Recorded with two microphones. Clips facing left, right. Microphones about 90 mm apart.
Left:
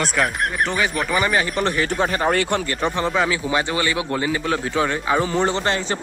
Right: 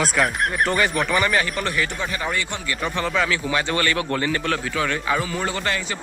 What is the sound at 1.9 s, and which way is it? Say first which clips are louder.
Speech: left 6 dB; 45° left (ahead or behind).